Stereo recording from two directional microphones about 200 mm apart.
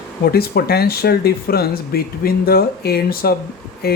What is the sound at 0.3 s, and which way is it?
Speech, 50° left (ahead or behind).